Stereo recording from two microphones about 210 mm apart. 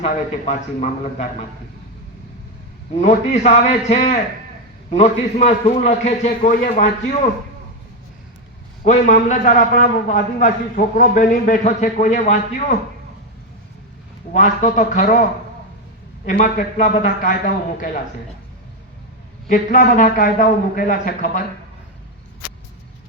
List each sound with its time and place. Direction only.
0.0 s a man's voice: 35° left (ahead or behind)
2.9 s a man's voice: 30° left (ahead or behind)
8.8 s a man's voice: 35° left (ahead or behind)
14.3 s a man's voice: 35° left (ahead or behind)
19.5 s a man's voice: 35° left (ahead or behind)